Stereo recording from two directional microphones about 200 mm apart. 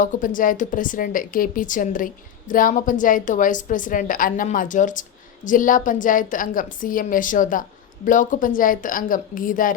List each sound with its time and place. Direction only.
0.0 s a woman's voice: 40° left (ahead or behind)